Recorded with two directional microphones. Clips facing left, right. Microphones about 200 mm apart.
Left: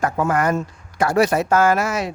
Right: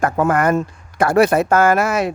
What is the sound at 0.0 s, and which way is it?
Speech, 55° right (ahead or behind).